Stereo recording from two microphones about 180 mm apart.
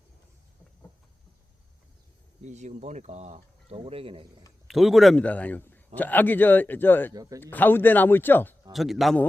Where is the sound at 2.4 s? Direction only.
40° right (ahead or behind).